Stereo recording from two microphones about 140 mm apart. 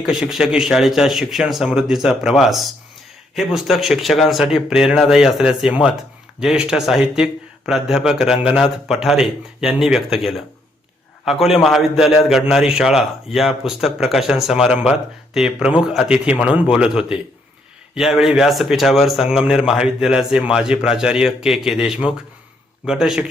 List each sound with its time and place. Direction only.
0.0 s a man's voice: 5° right (ahead or behind)